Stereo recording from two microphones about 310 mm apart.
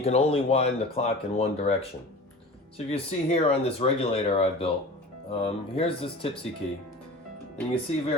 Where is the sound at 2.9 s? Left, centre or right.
Centre.